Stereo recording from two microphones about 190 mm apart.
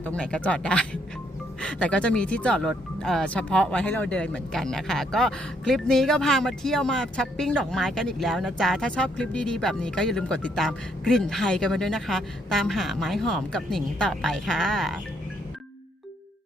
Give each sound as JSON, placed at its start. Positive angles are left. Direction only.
{"t": 0.0, "sound": "speech", "side_deg": 5}